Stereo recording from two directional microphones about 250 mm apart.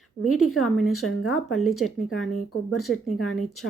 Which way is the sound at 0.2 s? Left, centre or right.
Centre.